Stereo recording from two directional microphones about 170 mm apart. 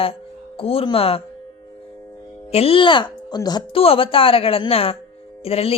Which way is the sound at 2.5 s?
35° left (ahead or behind).